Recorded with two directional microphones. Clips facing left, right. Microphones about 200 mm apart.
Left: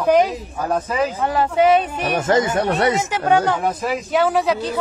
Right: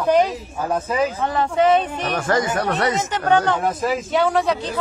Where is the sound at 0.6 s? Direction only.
Centre (ahead or behind).